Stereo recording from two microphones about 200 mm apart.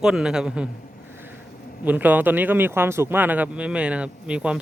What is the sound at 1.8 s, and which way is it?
Speech, 10° right (ahead or behind).